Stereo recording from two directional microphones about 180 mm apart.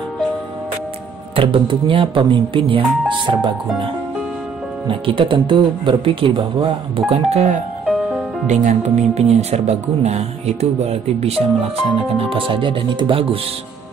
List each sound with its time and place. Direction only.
1.3 s speech: 30° right (ahead or behind)
4.8 s speech: 30° right (ahead or behind)
7.8 s music: centre (ahead or behind)
8.5 s speech: 40° right (ahead or behind)